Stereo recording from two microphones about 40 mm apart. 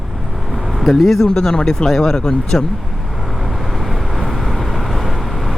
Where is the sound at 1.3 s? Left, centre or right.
Left.